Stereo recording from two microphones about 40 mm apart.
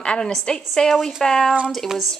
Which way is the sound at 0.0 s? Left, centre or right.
Left.